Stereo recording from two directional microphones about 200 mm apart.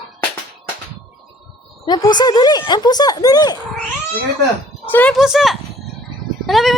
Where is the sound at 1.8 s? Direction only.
20° left (ahead or behind).